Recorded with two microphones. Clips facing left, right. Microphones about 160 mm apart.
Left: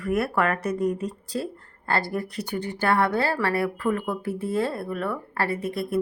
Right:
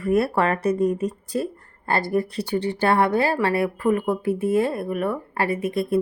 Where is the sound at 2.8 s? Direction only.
20° right (ahead or behind).